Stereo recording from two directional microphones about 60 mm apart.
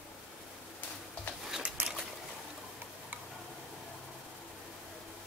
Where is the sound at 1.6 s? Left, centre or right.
Centre.